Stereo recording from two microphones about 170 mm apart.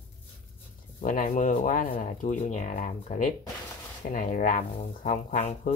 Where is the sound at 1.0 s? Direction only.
50° left (ahead or behind).